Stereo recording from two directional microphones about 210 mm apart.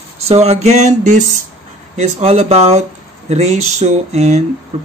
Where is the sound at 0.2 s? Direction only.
30° right (ahead or behind).